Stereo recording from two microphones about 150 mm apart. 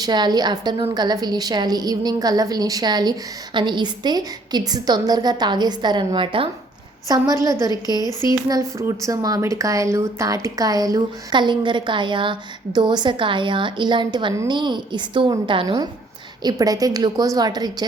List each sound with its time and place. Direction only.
0.0 s a woman's voice: 30° right (ahead or behind)